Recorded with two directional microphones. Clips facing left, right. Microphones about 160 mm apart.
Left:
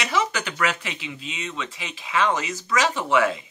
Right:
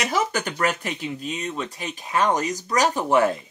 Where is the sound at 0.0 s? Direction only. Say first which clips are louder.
Right 1 dB; 45° right (ahead or behind).